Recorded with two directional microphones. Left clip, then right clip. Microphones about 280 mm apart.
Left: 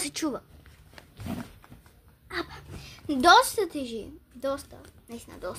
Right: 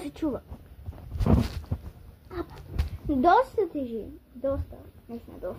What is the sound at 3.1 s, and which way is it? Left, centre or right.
A woman's voice, left.